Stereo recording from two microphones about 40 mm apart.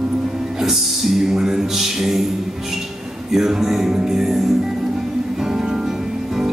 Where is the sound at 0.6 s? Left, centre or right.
Centre.